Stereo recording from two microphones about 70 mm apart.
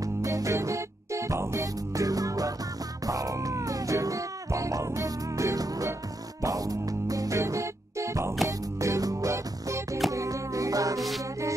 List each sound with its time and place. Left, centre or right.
0.0 s music: right
11.0 s music: centre